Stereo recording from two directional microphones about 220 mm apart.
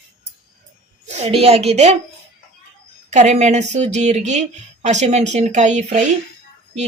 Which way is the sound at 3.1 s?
30° right (ahead or behind).